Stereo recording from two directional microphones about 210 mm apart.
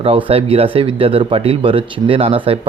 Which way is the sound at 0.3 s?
25° right (ahead or behind).